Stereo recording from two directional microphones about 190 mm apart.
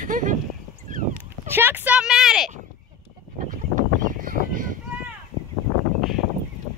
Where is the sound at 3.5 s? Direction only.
45° right (ahead or behind).